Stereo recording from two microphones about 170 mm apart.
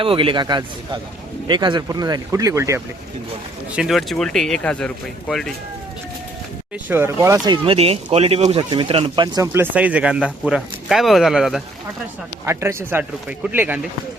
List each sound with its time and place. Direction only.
0.0 s speech: 30° right (ahead or behind); by 2.8 s 15° right (ahead or behind)
3.7 s speech: 5° right (ahead or behind)
6.8 s speech: 15° right (ahead or behind)
7.5 s speech: 30° right (ahead or behind); by 11.6 s centre (ahead or behind)
12.5 s speech: 15° right (ahead or behind)